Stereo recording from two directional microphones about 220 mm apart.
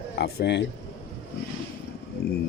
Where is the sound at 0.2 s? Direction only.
50° left (ahead or behind).